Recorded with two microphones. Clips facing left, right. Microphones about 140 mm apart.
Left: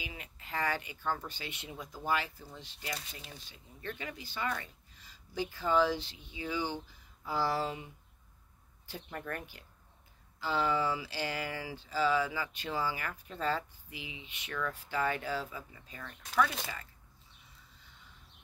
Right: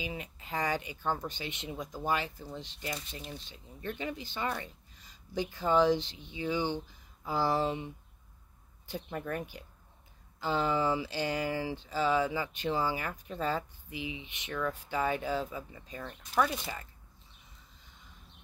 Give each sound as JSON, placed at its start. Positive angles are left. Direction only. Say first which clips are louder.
{"t": 0.0, "sound": "speech", "louder": "right 7 dB", "side_deg": -20}